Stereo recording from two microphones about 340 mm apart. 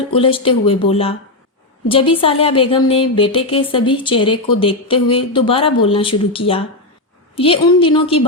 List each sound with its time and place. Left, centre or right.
0.1 s speech: centre